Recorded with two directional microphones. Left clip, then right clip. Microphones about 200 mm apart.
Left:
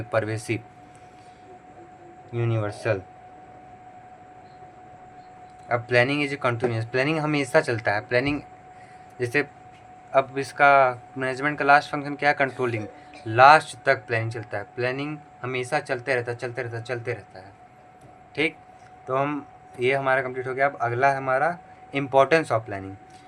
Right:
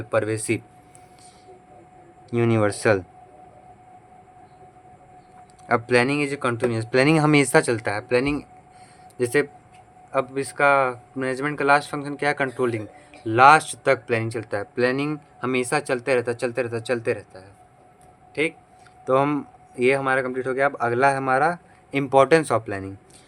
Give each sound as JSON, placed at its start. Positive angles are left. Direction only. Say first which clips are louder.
{"t": 0.1, "sound": "speech", "louder": "right 3 dB", "side_deg": -15}
{"t": 2.3, "sound": "speech", "louder": "right 8 dB", "side_deg": -25}
{"t": 5.6, "sound": "speech", "louder": "right 2 dB", "side_deg": -25}
{"t": 18.4, "sound": "speech", "louder": "right 1 dB", "side_deg": -20}
{"t": 19.0, "sound": "speech", "louder": "right 5 dB", "side_deg": -35}